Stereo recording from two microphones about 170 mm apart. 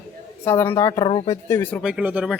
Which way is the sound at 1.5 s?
10° left (ahead or behind).